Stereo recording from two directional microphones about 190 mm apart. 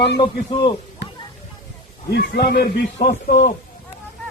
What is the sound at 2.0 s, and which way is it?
A man's voice, 60° left (ahead or behind).